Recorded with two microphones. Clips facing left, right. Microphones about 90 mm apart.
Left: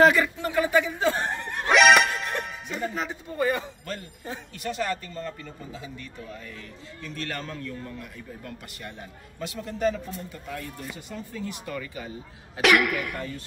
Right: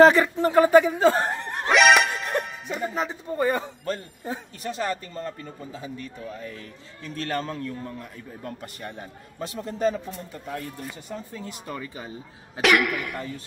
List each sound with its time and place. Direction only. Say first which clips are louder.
0.0 s speech: right 4 dB; 30° right (ahead or behind)
1.7 s music: even; centre (ahead or behind)
3.0 s a man's voice: right 4 dB; 35° right (ahead or behind)
7.2 s speech: right 6 dB; 35° right (ahead or behind)
11.1 s speech: left 3 dB; 30° right (ahead or behind)
12.6 s speech: even; centre (ahead or behind)